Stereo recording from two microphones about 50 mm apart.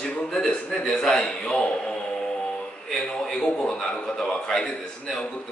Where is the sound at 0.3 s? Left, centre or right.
Centre.